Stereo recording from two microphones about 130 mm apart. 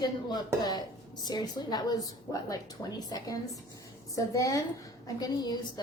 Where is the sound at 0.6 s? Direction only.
30° left (ahead or behind).